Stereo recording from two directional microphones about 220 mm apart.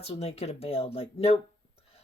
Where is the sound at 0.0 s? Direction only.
30° left (ahead or behind).